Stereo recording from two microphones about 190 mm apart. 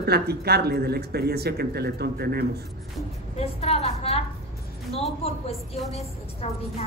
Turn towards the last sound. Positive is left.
turn(degrees=30)  # may be behind; listen again after turning